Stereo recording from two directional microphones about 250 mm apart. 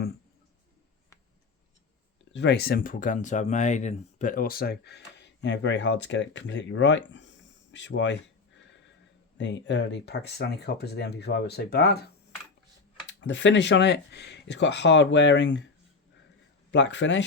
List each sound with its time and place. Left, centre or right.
2.3 s speech: left
9.4 s speech: left
13.1 s speech: left
16.7 s speech: left